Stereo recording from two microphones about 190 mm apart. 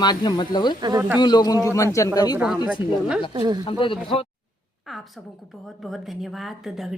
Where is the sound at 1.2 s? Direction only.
20° left (ahead or behind).